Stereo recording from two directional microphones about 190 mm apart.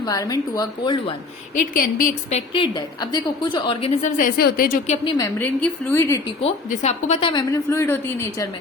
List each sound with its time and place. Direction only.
0.0 s a woman's voice: 20° left (ahead or behind)
1.7 s a woman's voice: 45° left (ahead or behind)
2.5 s a woman's voice: 25° left (ahead or behind)
4.2 s a woman's voice: 50° left (ahead or behind)
5.1 s speech: 15° left (ahead or behind)
6.4 s a woman's voice: 35° left (ahead or behind); by 8.4 s 15° left (ahead or behind)